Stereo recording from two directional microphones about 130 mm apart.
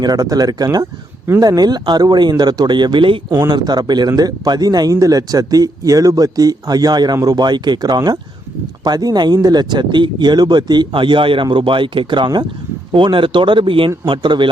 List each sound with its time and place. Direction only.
0.0 s speech: 30° right (ahead or behind)